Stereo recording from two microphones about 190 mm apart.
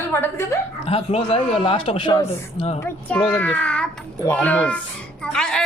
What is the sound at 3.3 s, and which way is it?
A child's voice, 10° left (ahead or behind).